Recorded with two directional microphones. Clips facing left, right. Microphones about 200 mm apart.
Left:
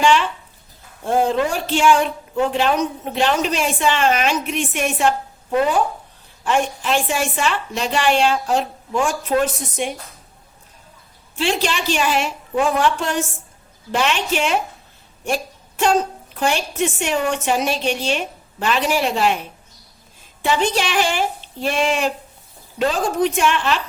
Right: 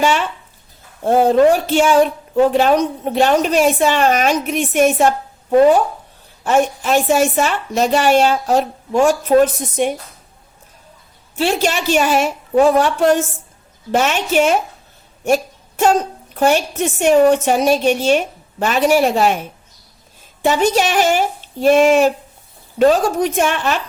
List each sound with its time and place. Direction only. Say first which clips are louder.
0.0 s a woman's voice: even; 40° right (ahead or behind)
6.4 s a woman's voice: right 5 dB; 40° right (ahead or behind)
11.3 s a woman's voice: right 4 dB; 45° right (ahead or behind)
15.2 s a sound: right 7 dB; 45° right (ahead or behind)
16.4 s a woman's voice: right 5 dB; 45° right (ahead or behind)
20.7 s a woman's voice: right 5 dB; 40° right (ahead or behind)